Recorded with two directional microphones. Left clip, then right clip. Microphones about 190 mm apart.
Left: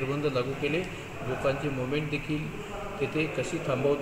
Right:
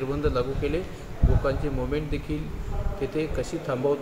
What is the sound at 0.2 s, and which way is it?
Speech, 15° right (ahead or behind).